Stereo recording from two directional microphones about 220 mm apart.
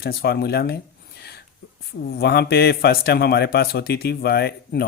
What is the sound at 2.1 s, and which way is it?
Speech, 45° left (ahead or behind).